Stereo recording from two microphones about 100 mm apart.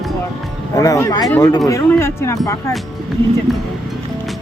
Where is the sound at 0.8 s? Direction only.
35° left (ahead or behind).